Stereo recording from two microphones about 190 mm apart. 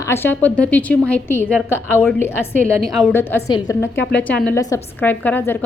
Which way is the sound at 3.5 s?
20° left (ahead or behind).